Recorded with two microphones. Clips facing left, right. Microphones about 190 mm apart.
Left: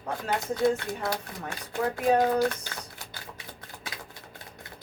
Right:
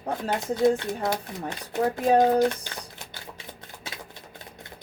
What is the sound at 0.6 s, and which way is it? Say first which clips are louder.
Speech: right 4 dB; 20° right (ahead or behind).